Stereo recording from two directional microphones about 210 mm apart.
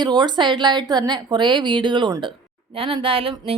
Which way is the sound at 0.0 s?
20° right (ahead or behind).